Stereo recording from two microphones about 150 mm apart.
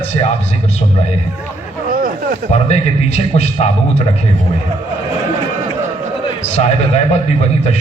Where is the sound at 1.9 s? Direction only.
70° right (ahead or behind).